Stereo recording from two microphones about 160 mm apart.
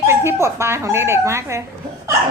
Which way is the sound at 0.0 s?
15° right (ahead or behind).